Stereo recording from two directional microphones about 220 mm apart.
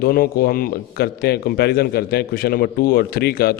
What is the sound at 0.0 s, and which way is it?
A man's voice, 45° left (ahead or behind).